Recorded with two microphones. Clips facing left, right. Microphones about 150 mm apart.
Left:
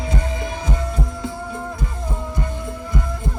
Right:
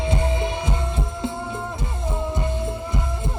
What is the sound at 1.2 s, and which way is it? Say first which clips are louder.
Music: even; 25° right (ahead or behind).